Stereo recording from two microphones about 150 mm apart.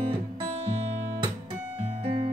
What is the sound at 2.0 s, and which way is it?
Music, 40° right (ahead or behind).